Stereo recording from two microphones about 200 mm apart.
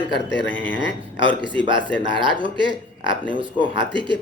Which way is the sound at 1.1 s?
25° right (ahead or behind).